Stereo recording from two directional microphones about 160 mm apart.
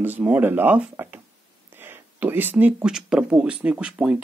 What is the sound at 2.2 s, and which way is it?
Speech, 10° right (ahead or behind).